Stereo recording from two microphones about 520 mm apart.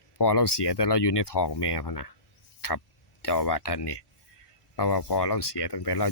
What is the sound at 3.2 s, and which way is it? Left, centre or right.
Speech, left.